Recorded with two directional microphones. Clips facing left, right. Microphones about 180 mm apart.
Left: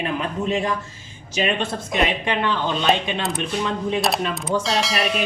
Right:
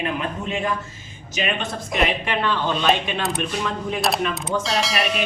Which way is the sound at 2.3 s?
15° left (ahead or behind).